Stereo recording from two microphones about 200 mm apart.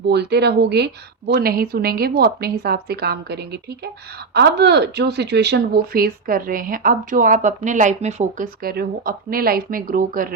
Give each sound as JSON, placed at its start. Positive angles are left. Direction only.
{"t": 0.1, "sound": "speech", "side_deg": -55}